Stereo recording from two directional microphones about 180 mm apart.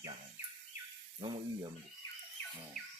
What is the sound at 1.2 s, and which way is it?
Speech, 30° right (ahead or behind).